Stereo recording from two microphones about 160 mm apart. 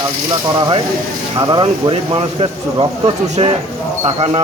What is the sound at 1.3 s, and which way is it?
Speech, 30° right (ahead or behind).